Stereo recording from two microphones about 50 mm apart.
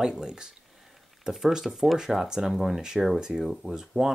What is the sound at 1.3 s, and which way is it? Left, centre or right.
Speech, centre.